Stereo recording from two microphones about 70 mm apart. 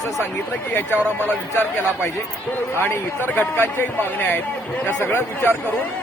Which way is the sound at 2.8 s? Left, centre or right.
Left.